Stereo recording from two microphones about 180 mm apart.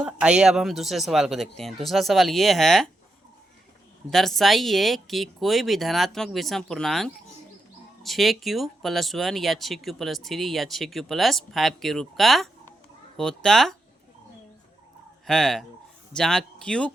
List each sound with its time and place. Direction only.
0.0 s speech: 5° right (ahead or behind)
4.1 s speech: centre (ahead or behind)
15.3 s speech: centre (ahead or behind)